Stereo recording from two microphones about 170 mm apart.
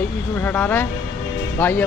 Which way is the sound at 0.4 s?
10° left (ahead or behind).